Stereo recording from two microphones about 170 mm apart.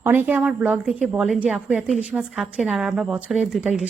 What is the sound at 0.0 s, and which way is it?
A woman's voice, 10° right (ahead or behind).